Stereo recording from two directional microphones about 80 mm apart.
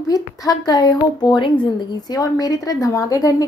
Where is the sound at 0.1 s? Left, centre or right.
Left.